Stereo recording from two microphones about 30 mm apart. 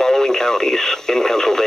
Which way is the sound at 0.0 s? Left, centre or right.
Centre.